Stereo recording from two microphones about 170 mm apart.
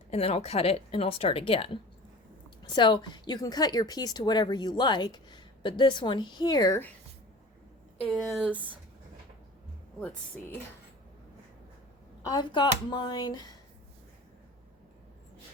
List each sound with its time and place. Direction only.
0.1 s a woman's voice: 35° left (ahead or behind); by 6.9 s 15° left (ahead or behind)
8.0 s speech: centre (ahead or behind)
12.3 s a woman's voice: 25° left (ahead or behind)